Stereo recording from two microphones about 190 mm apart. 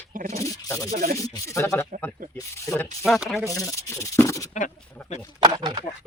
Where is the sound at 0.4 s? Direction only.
20° left (ahead or behind).